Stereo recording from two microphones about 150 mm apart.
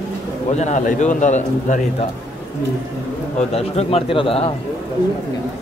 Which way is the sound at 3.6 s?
40° left (ahead or behind).